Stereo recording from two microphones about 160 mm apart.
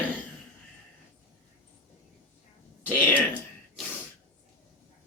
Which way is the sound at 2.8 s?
10° left (ahead or behind).